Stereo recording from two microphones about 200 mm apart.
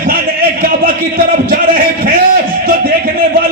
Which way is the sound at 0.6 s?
45° right (ahead or behind).